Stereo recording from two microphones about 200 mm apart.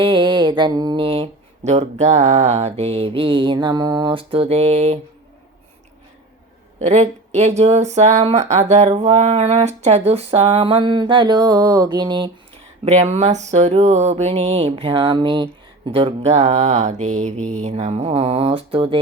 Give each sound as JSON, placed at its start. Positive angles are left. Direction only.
{"t": 0.0, "sound": "a sound", "side_deg": -25}
{"t": 6.8, "sound": "speech", "side_deg": -35}
{"t": 12.8, "sound": "speech", "side_deg": -35}